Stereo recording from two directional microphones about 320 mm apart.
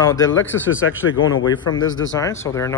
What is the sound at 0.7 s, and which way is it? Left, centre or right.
Speech, left.